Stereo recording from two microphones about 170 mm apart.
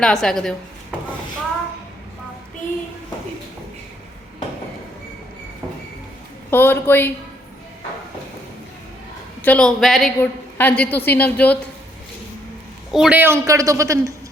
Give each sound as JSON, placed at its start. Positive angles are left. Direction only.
{"t": 0.0, "sound": "a woman's voice", "side_deg": 5}
{"t": 6.5, "sound": "a woman's voice", "side_deg": 15}
{"t": 9.4, "sound": "a man's voice", "side_deg": 5}
{"t": 12.9, "sound": "a man's voice", "side_deg": -5}